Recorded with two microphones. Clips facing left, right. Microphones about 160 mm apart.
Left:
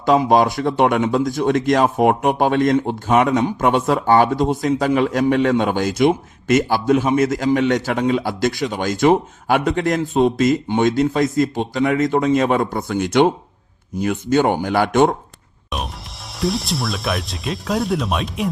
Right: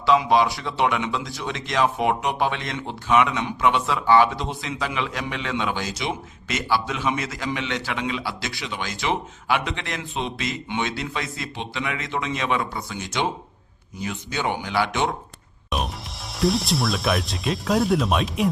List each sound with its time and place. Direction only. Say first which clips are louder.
0.0 s speech: left 4 dB; 45° left (ahead or behind)
15.7 s music: even; centre (ahead or behind)
16.3 s speech: even; centre (ahead or behind)